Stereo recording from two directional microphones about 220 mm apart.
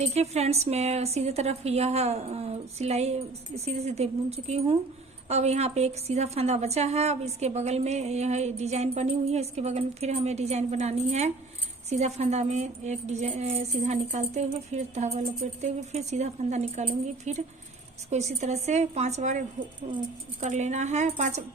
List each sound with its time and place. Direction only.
0.0 s a woman's voice: 30° right (ahead or behind)